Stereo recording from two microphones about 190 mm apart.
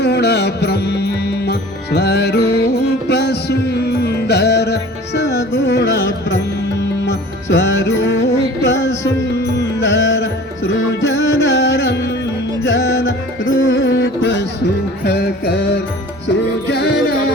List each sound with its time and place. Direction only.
0.0 s music: 60° left (ahead or behind)
15.0 s music: 55° left (ahead or behind)